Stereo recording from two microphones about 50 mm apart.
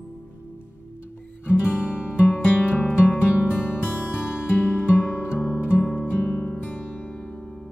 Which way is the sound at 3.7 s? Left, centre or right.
Left.